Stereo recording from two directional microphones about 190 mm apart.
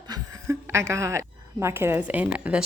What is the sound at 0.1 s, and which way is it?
A woman's voice, 15° right (ahead or behind).